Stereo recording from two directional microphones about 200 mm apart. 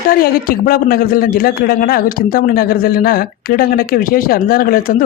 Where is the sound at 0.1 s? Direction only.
45° left (ahead or behind).